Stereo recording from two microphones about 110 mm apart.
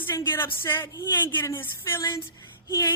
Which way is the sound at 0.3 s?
20° left (ahead or behind).